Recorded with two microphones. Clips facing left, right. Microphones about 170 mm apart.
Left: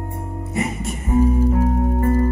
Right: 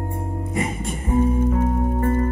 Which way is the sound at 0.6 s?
30° right (ahead or behind).